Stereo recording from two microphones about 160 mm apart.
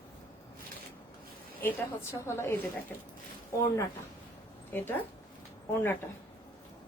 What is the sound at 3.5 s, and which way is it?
Speech, 15° left (ahead or behind).